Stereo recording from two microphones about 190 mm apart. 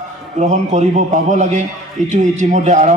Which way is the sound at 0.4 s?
40° right (ahead or behind).